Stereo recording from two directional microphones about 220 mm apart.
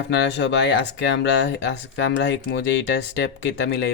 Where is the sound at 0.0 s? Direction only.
50° left (ahead or behind).